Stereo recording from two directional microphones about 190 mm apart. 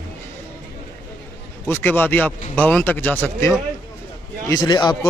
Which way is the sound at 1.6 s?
10° left (ahead or behind).